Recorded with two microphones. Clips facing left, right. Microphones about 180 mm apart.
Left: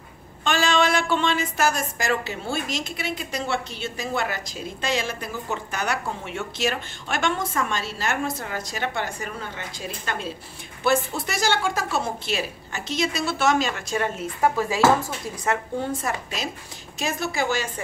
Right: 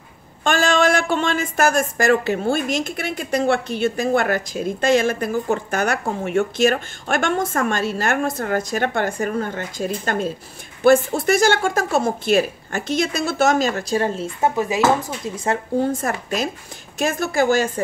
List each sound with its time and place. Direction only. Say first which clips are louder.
0.4 s speech: right 4 dB; 50° right (ahead or behind); by 15.4 s 20° right (ahead or behind)
15.4 s speech: right 6 dB; 30° right (ahead or behind)
15.9 s speech: right 5 dB; 50° right (ahead or behind)